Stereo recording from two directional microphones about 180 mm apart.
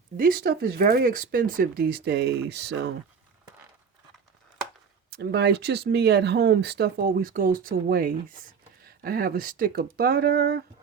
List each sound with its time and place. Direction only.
0.2 s speech: 55° right (ahead or behind)
5.1 s speech: 65° right (ahead or behind)